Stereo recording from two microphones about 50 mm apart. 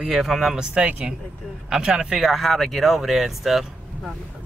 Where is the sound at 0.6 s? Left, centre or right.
Right.